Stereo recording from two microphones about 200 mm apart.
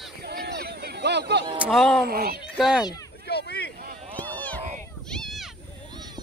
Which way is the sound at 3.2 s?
55° left (ahead or behind).